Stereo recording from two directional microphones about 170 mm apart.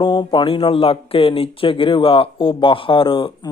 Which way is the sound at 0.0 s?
25° left (ahead or behind).